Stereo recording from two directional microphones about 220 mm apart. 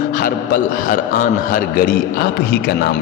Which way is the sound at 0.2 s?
40° left (ahead or behind).